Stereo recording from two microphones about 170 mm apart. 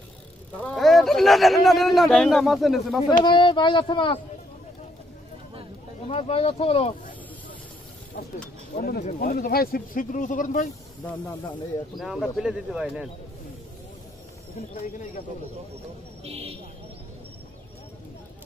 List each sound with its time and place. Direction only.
0.6 s a man's voice: 5° left (ahead or behind)
3.3 s speech: 25° left (ahead or behind)
6.0 s speech: 35° left (ahead or behind)
9.0 s speech: 55° left (ahead or behind)
10.7 s speech: 20° left (ahead or behind)
12.0 s a man's voice: centre (ahead or behind)
16.3 s speech: 35° right (ahead or behind)